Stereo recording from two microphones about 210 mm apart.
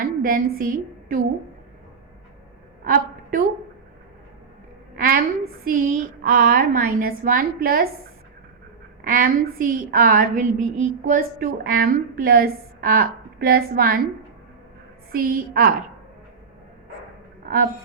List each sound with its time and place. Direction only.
0.0 s a woman's voice: 40° right (ahead or behind)
2.8 s a woman's voice: 45° right (ahead or behind)
4.9 s a woman's voice: 45° right (ahead or behind)
9.0 s a woman's voice: 40° right (ahead or behind)
15.1 s a woman's voice: 45° right (ahead or behind)